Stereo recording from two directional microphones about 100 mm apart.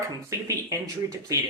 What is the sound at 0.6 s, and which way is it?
Speech, 35° right (ahead or behind).